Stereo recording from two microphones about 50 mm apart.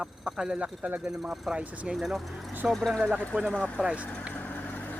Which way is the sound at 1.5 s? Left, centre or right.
Right.